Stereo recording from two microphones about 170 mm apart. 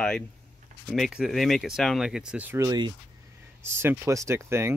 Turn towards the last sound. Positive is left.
turn(degrees=-15)  # may be behind; listen again after turning